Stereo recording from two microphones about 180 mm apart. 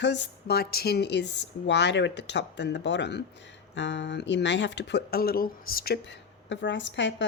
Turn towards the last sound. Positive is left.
turn(degrees=90)